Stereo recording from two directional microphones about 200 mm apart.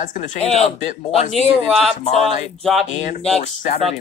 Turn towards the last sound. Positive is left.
turn(degrees=35)  # may be behind; listen again after turning